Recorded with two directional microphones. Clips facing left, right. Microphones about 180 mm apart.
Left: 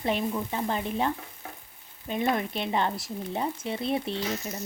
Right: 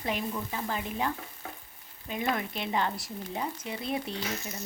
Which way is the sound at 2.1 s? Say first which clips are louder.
Left 4 dB; 25° left (ahead or behind).